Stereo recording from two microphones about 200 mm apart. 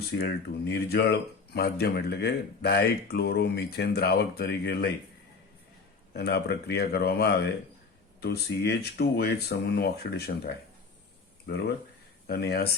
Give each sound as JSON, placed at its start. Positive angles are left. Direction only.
{"t": 0.2, "sound": "speech", "side_deg": 55}
{"t": 6.1, "sound": "speech", "side_deg": 55}